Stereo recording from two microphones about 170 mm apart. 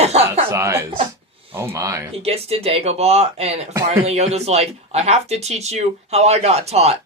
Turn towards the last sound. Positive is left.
turn(degrees=-40)  # may be behind; listen again after turning